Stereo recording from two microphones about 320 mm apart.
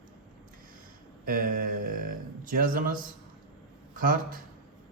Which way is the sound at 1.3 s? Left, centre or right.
Right.